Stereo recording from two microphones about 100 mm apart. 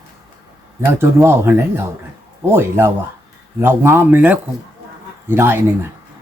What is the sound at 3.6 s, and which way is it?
Speech, 25° right (ahead or behind).